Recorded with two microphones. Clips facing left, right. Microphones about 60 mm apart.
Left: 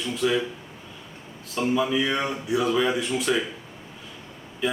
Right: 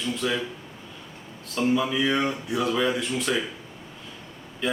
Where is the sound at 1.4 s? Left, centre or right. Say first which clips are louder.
Even; centre.